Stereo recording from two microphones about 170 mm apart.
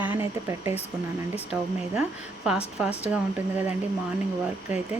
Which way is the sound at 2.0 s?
5° right (ahead or behind).